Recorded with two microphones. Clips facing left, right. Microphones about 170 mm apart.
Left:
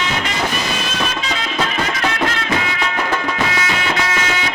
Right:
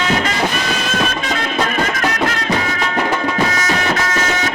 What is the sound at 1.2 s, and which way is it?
Music, 50° right (ahead or behind).